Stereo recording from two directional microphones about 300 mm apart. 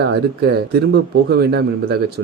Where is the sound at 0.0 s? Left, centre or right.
Right.